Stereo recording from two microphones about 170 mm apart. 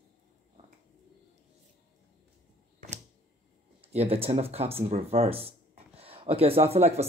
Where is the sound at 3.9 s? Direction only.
35° right (ahead or behind).